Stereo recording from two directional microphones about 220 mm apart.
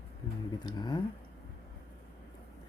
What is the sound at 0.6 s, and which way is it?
Mantra, 20° left (ahead or behind).